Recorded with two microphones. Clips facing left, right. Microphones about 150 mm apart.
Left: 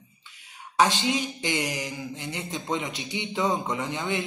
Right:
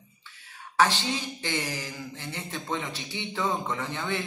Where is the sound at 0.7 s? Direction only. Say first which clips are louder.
Left 2 dB; 15° left (ahead or behind).